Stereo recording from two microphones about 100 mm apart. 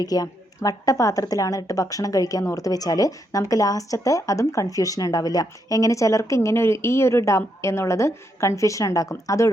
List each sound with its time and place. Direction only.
0.0 s a woman's voice: 40° left (ahead or behind)